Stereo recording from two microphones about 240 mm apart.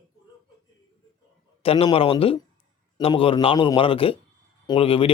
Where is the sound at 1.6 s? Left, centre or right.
Left.